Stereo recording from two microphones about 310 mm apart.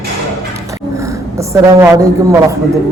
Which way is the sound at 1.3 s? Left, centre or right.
Centre.